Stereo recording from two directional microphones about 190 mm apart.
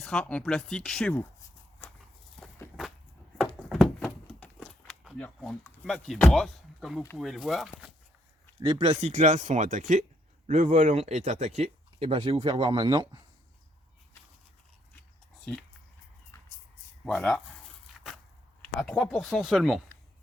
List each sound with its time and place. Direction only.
0.0 s speech: 5° left (ahead or behind)
1.8 s walk: 10° left (ahead or behind)
3.7 s a sound: centre (ahead or behind)
7.2 s speech: centre (ahead or behind)
8.6 s speech: 20° right (ahead or behind)
9.0 s speech: 40° right (ahead or behind)
16.3 s vehicle: 15° left (ahead or behind)
17.1 s speech: 5° left (ahead or behind)
18.0 s wood: centre (ahead or behind)
18.6 s speech: 5° left (ahead or behind)